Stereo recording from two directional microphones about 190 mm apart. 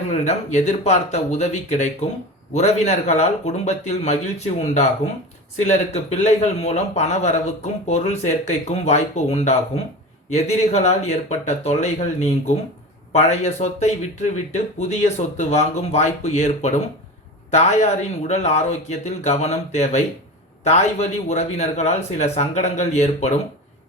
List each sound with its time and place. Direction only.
0.1 s speech: 35° left (ahead or behind)